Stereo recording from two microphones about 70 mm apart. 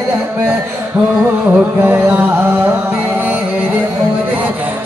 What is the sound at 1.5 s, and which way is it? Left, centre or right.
Music, right.